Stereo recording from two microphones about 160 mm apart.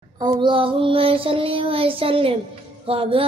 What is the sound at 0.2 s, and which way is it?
Female singing, 30° right (ahead or behind).